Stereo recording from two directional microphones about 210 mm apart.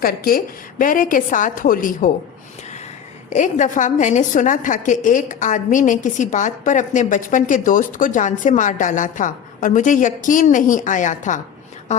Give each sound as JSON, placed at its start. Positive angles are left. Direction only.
{"t": 0.0, "sound": "a woman's voice", "side_deg": 45}
{"t": 3.3, "sound": "a woman's voice", "side_deg": 35}